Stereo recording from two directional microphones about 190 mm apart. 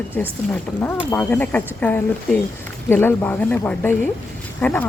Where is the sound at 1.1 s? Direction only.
10° left (ahead or behind).